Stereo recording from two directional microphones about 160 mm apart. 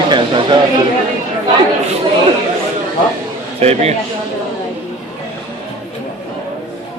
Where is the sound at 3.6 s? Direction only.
40° right (ahead or behind).